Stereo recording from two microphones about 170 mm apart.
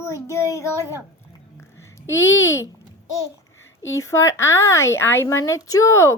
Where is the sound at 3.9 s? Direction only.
15° left (ahead or behind).